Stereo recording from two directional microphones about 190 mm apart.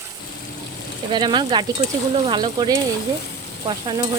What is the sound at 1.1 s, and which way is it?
Speech, 25° right (ahead or behind).